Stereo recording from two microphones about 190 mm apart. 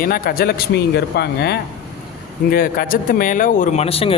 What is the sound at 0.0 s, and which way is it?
Speech, 50° left (ahead or behind).